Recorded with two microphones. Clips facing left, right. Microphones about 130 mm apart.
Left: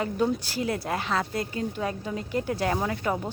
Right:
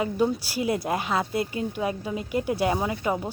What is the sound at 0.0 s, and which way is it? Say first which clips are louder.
A woman's voice: right 2 dB; 10° right (ahead or behind).